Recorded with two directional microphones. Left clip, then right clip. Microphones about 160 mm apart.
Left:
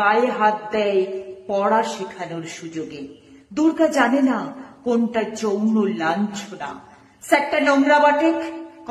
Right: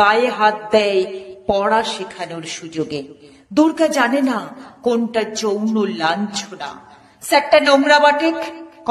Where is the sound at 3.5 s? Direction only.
25° right (ahead or behind).